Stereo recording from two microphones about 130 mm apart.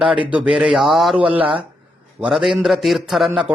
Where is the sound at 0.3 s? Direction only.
10° right (ahead or behind).